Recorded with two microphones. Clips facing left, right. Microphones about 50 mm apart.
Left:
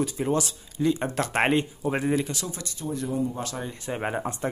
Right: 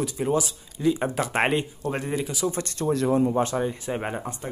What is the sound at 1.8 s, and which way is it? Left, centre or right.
Speech, centre.